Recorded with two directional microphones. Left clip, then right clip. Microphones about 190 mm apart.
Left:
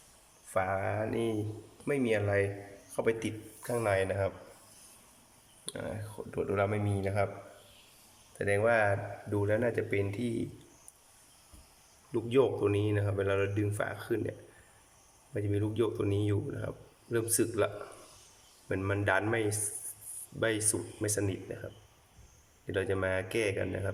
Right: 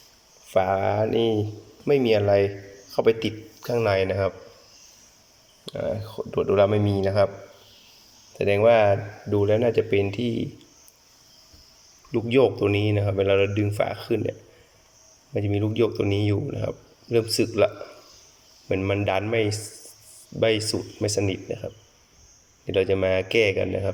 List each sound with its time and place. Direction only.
0.5 s speech: 15° right (ahead or behind)
5.6 s speech: 10° right (ahead or behind)
8.4 s speech: 10° right (ahead or behind)
12.1 s speech: 10° right (ahead or behind)
18.7 s speech: 5° right (ahead or behind)
22.6 s speech: 10° right (ahead or behind)